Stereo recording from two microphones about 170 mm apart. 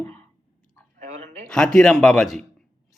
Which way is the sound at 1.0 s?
50° right (ahead or behind).